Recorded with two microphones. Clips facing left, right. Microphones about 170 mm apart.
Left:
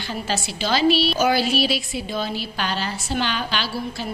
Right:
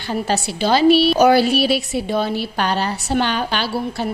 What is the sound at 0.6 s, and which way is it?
Speech, 55° right (ahead or behind).